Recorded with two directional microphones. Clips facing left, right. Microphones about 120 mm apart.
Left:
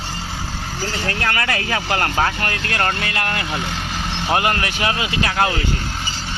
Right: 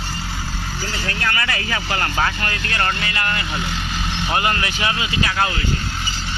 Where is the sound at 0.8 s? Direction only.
40° left (ahead or behind); by 3.4 s 65° left (ahead or behind).